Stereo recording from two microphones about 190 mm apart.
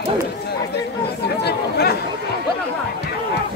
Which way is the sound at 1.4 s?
60° left (ahead or behind).